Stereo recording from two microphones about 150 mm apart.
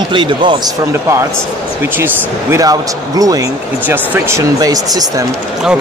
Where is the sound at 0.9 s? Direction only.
20° right (ahead or behind).